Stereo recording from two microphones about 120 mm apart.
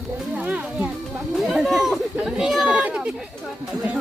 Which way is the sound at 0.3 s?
10° right (ahead or behind).